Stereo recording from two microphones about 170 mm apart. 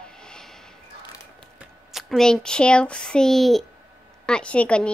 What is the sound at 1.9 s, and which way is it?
A woman's voice, centre (ahead or behind).